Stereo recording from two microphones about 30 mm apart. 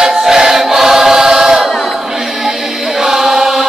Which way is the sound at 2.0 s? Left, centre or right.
Centre.